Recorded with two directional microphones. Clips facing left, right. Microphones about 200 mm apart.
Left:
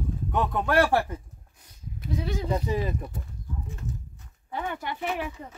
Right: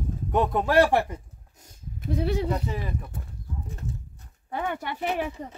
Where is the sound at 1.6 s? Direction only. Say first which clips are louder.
Right 4 dB; 55° right (ahead or behind).